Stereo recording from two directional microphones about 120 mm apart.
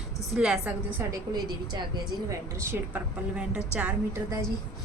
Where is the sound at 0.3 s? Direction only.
5° right (ahead or behind).